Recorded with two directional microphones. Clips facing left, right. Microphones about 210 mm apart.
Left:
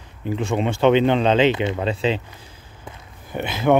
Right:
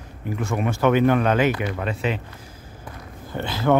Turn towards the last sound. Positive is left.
turn(degrees=20)  # may be behind; listen again after turning